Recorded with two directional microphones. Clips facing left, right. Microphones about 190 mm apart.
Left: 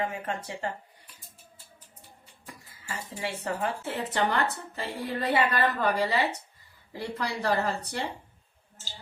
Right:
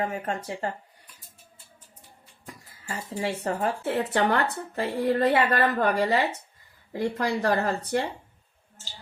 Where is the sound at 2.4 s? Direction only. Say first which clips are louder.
Right 4 dB; 40° right (ahead or behind).